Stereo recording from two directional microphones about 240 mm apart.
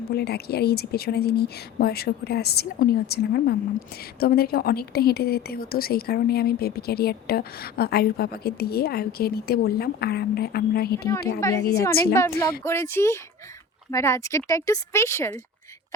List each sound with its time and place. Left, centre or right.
0.1 s a woman's voice: left
10.9 s speech: centre